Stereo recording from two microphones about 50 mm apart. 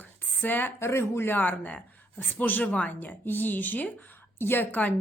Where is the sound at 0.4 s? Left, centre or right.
Left.